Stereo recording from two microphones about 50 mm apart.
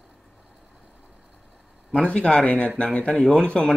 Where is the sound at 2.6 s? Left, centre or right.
Left.